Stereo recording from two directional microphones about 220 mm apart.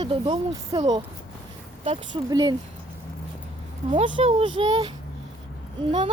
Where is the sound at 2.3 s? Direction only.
20° right (ahead or behind).